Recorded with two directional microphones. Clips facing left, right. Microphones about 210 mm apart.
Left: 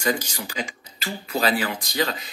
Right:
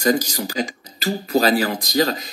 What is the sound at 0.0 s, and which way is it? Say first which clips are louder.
Speech: right 6 dB; 40° right (ahead or behind).